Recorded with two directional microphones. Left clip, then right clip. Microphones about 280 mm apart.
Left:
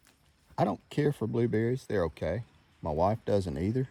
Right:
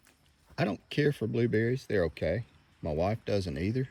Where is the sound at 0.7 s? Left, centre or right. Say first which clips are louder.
Right 1 dB; centre.